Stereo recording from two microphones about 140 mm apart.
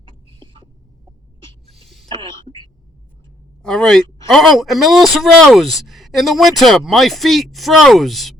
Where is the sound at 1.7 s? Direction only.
Centre (ahead or behind).